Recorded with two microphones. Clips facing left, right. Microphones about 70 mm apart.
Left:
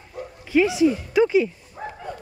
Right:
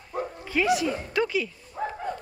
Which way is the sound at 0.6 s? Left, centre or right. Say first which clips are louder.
Left 3 dB; left.